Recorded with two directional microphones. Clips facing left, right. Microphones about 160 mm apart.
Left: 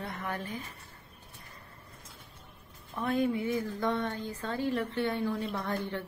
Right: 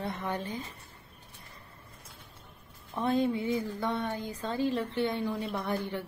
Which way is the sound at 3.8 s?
10° right (ahead or behind).